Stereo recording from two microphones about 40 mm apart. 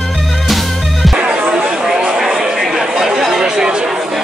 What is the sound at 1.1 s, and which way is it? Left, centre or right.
Music, right.